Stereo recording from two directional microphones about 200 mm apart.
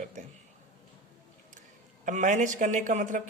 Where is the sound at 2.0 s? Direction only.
40° right (ahead or behind).